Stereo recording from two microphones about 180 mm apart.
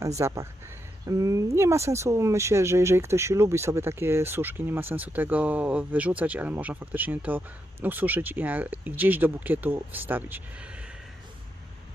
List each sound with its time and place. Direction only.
0.2 s speech: 15° right (ahead or behind)